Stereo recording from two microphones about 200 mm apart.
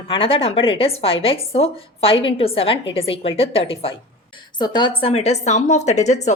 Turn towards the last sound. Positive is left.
turn(degrees=35)  # may be behind; listen again after turning